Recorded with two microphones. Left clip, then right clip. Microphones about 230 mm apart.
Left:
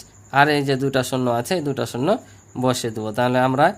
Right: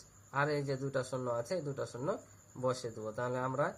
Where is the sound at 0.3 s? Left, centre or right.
Left.